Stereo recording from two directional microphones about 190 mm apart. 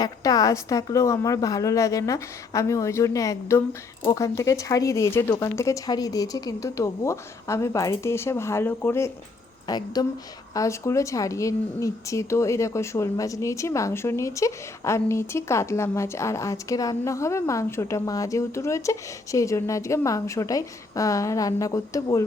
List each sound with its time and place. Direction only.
0.0 s speech: 20° left (ahead or behind)